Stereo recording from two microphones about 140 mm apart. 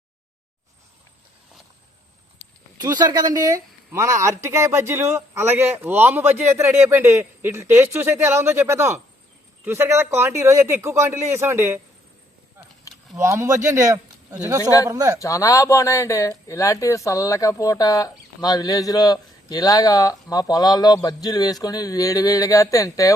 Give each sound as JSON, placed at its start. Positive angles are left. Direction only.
{"t": 2.7, "sound": "speech", "side_deg": -30}
{"t": 13.1, "sound": "speech", "side_deg": -20}
{"t": 14.6, "sound": "speech", "side_deg": 25}
{"t": 14.8, "sound": "speech", "side_deg": -25}
{"t": 15.2, "sound": "speech", "side_deg": 25}